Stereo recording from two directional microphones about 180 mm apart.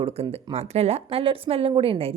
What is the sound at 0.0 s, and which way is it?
A woman's voice, 35° right (ahead or behind).